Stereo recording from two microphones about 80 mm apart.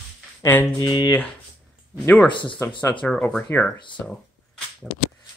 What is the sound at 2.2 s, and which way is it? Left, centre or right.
Speech, left.